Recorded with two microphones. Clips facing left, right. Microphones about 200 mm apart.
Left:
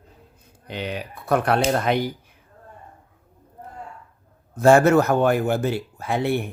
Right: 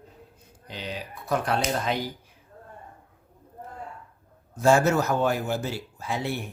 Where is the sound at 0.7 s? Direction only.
60° left (ahead or behind).